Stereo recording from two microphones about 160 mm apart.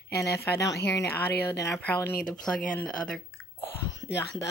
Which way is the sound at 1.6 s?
15° left (ahead or behind).